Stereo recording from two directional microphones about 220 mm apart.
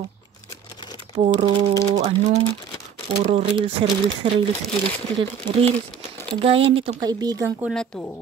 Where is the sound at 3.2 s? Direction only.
25° right (ahead or behind).